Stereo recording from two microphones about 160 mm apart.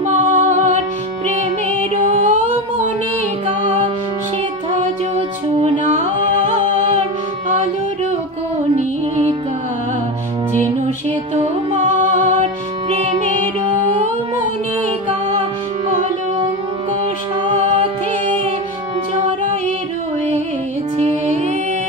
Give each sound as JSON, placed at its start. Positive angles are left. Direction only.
{"t": 0.0, "sound": "music", "side_deg": -50}
{"t": 1.8, "sound": "music", "side_deg": -45}
{"t": 4.7, "sound": "music", "side_deg": -50}
{"t": 8.7, "sound": "music", "side_deg": -45}
{"t": 11.1, "sound": "music", "side_deg": -40}
{"t": 11.8, "sound": "music", "side_deg": -55}
{"t": 12.9, "sound": "music", "side_deg": -35}
{"t": 17.5, "sound": "music", "side_deg": -40}
{"t": 21.0, "sound": "music", "side_deg": -45}